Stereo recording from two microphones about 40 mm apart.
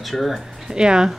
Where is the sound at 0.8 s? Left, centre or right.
Right.